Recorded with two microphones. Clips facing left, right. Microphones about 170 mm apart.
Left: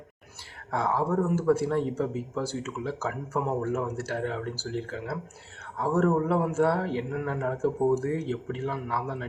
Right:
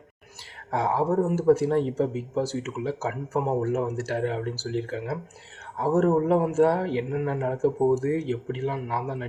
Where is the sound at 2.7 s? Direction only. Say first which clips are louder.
Right 3 dB; 35° right (ahead or behind).